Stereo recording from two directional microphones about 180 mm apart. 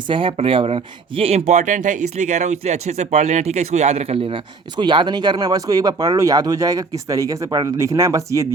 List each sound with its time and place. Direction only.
0.1 s speech: 30° right (ahead or behind)